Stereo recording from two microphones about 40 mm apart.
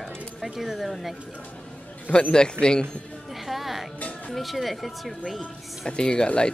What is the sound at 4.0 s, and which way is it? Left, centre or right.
Music, left.